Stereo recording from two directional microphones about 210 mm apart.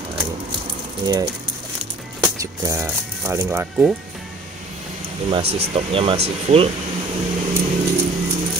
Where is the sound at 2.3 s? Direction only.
15° right (ahead or behind).